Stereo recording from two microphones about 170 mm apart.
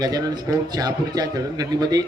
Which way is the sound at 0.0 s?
20° right (ahead or behind).